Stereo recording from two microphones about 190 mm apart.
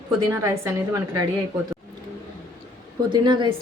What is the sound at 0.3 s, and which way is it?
Speech, 15° right (ahead or behind).